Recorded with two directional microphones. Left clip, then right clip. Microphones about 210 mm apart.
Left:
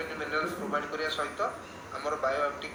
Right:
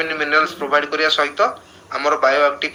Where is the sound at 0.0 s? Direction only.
45° right (ahead or behind).